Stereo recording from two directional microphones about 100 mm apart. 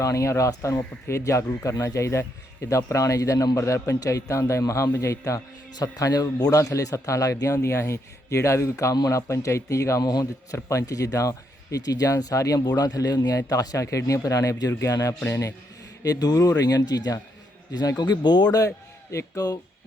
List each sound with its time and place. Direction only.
0.0 s a man's voice: 30° left (ahead or behind)